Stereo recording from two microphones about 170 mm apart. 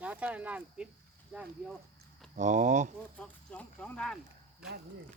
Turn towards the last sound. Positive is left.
turn(degrees=5)  # may be behind; listen again after turning